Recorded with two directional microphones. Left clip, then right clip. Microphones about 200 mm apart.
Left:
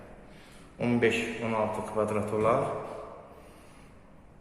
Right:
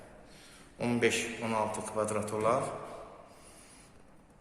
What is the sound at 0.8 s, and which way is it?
A man's voice, 15° right (ahead or behind).